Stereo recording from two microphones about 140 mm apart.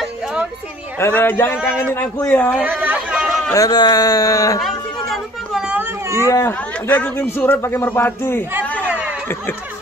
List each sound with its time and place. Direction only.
0.0 s a sound: 5° right (ahead or behind)
0.9 s a man's voice: 15° left (ahead or behind)
2.6 s chatter: 10° right (ahead or behind)
3.5 s speech: 25° left (ahead or behind)
4.6 s chatter: centre (ahead or behind)
6.2 s speech: 20° left (ahead or behind)
6.9 s a man's voice: 10° left (ahead or behind)